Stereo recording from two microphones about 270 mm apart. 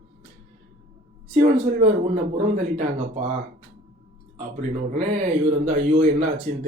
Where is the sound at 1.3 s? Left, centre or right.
Right.